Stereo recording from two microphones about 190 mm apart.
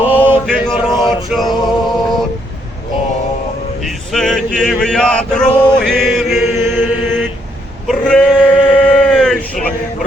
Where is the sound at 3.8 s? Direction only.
Centre (ahead or behind).